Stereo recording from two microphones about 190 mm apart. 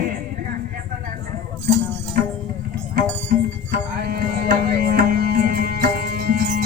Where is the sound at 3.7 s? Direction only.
50° right (ahead or behind).